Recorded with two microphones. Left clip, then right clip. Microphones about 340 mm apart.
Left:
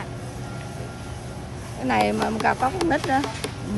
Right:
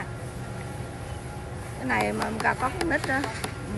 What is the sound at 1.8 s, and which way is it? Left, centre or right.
Speech, left.